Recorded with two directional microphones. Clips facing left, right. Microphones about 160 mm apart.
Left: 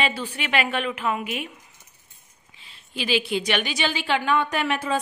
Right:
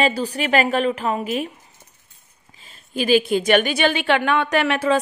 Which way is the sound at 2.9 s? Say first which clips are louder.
Right 7 dB; 45° right (ahead or behind).